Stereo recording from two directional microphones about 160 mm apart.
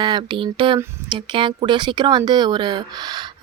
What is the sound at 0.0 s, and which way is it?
Speech, 30° right (ahead or behind).